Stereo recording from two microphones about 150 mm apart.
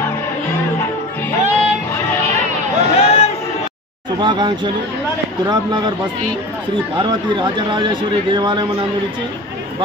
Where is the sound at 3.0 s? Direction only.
40° left (ahead or behind).